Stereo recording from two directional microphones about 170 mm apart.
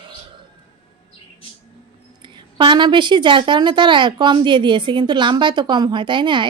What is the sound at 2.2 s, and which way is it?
A woman's voice, 30° right (ahead or behind).